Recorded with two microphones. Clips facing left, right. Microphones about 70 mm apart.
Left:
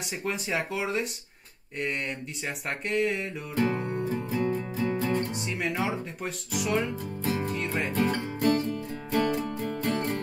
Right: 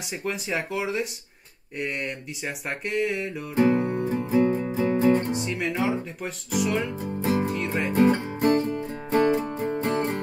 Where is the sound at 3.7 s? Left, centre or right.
Centre.